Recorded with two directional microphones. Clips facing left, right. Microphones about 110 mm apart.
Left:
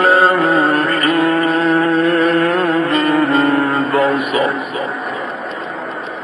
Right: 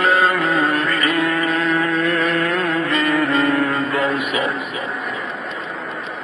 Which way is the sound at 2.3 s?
45° left (ahead or behind).